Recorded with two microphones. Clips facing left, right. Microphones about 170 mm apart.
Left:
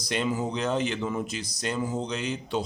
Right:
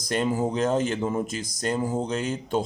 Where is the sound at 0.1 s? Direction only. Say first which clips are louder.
Right 3 dB; 45° right (ahead or behind).